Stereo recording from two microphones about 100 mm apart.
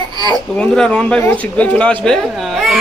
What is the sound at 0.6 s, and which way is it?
Speech, 10° left (ahead or behind).